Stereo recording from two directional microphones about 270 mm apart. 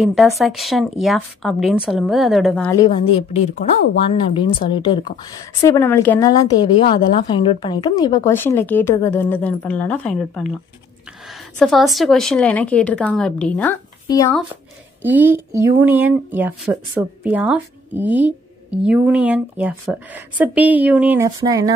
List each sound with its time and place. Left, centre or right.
0.0 s a woman's voice: centre
11.5 s speech: centre
15.0 s speech: centre